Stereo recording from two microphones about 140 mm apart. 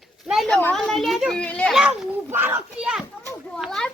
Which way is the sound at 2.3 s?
15° right (ahead or behind).